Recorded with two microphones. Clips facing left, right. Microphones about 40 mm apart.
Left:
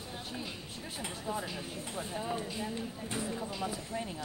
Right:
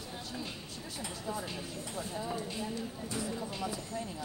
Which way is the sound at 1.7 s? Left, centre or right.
Left.